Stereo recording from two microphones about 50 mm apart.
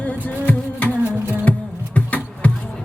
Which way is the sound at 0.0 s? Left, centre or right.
Left.